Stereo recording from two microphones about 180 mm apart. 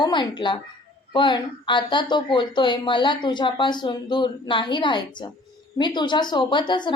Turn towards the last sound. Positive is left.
turn(degrees=25)  # may be behind; listen again after turning